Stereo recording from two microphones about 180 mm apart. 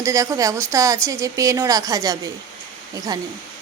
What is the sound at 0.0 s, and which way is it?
A woman's voice, 20° right (ahead or behind).